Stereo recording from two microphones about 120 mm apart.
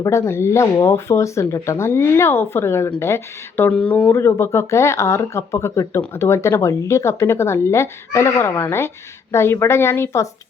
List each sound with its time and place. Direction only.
0.0 s speech: 25° left (ahead or behind)